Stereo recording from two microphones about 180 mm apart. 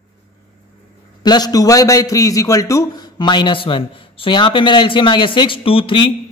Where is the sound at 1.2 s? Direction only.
20° left (ahead or behind).